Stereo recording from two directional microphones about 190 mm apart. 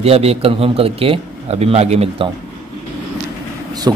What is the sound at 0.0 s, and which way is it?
A man's voice, 30° right (ahead or behind).